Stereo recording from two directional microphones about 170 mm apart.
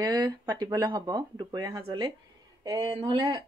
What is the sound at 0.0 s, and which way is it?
Speech, 25° right (ahead or behind).